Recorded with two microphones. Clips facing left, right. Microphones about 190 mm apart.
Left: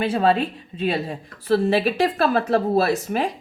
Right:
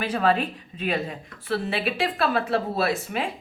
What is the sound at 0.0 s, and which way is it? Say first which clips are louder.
A woman's voice: left 4 dB; 30° left (ahead or behind).